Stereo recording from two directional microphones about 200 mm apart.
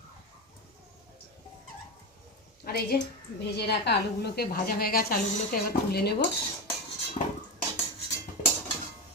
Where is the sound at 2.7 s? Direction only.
50° left (ahead or behind).